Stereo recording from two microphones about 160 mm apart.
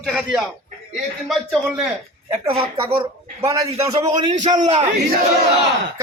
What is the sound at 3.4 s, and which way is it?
A man's voice, 20° right (ahead or behind).